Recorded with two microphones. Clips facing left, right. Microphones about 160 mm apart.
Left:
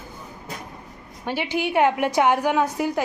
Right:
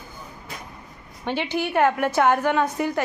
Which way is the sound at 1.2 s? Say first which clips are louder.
Even; 10° left (ahead or behind).